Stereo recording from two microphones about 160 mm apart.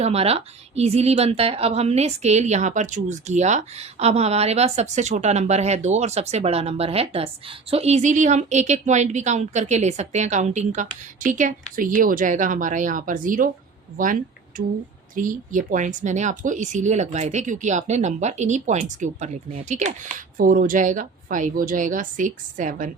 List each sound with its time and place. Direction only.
0.0 s a woman's voice: 40° right (ahead or behind)
20.4 s a woman's voice: 60° right (ahead or behind)